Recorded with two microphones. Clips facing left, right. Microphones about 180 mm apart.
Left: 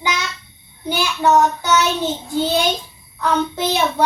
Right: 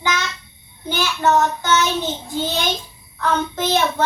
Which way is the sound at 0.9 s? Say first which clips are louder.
Left 2 dB; 10° left (ahead or behind).